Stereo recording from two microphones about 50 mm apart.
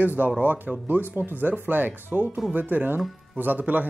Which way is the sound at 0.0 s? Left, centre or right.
Right.